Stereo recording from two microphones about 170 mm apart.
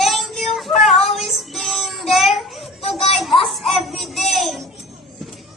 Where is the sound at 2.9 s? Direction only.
35° left (ahead or behind).